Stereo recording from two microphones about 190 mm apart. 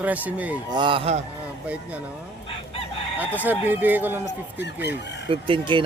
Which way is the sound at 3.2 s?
10° right (ahead or behind).